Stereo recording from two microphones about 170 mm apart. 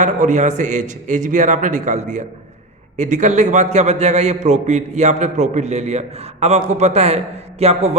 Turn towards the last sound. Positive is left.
turn(degrees=-40)  # may be behind; listen again after turning